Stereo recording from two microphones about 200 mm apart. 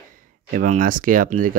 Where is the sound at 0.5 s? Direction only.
40° right (ahead or behind).